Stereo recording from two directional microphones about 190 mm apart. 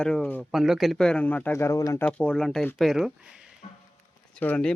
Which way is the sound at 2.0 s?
5° left (ahead or behind).